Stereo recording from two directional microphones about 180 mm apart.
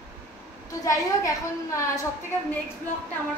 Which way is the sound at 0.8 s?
20° left (ahead or behind).